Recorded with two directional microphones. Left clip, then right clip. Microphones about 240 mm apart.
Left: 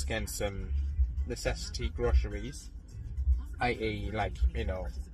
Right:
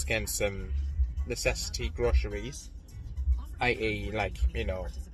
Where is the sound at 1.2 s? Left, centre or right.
Centre.